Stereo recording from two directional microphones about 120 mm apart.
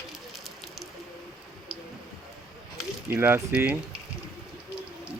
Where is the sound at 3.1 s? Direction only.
20° right (ahead or behind).